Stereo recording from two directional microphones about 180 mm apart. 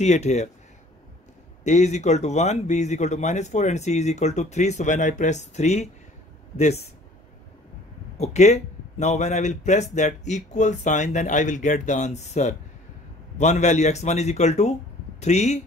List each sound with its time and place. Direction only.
0.0 s speech: 40° left (ahead or behind)
1.6 s speech: 40° left (ahead or behind)
8.2 s speech: 40° left (ahead or behind)